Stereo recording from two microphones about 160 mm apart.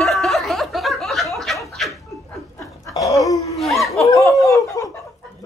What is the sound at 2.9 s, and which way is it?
Dog, 20° left (ahead or behind).